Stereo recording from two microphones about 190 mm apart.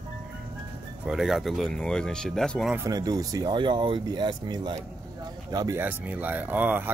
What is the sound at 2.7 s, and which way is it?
Speech, 15° right (ahead or behind).